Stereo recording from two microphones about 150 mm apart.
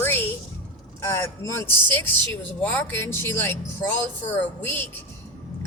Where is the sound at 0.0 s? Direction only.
15° left (ahead or behind).